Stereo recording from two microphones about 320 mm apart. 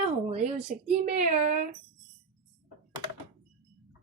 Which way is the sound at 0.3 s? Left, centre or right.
Centre.